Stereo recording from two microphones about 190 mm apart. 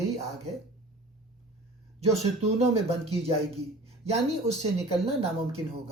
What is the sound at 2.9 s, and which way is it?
Speech, 30° right (ahead or behind).